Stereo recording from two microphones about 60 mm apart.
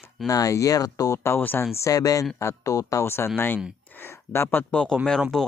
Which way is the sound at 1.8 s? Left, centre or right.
Left.